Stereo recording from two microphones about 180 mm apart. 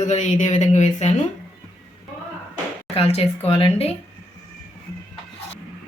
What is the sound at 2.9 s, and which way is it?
Speech, 35° left (ahead or behind).